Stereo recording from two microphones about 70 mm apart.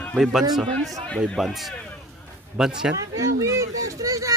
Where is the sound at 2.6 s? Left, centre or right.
Centre.